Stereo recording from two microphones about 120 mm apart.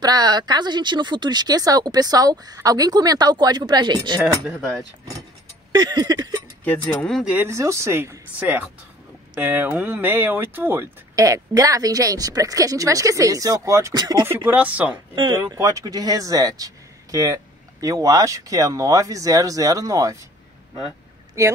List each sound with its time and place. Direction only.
0.0 s speech: 35° right (ahead or behind)
4.5 s speech: centre (ahead or behind)
5.7 s speech: 35° right (ahead or behind)
6.6 s speech: 10° left (ahead or behind)
7.2 s speech: 15° right (ahead or behind)
7.5 s speech: 25° right (ahead or behind)
14.2 s speech: 15° right (ahead or behind)
15.1 s speech: 40° right (ahead or behind)
15.5 s speech: 25° right (ahead or behind)
21.4 s speech: 25° right (ahead or behind)